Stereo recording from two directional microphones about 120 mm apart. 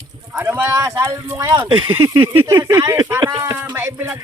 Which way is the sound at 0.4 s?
15° right (ahead or behind).